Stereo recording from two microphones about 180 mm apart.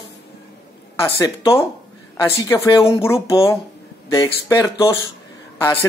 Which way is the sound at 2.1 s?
15° left (ahead or behind).